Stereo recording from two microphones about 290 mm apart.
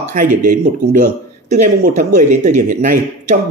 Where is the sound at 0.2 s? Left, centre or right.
Right.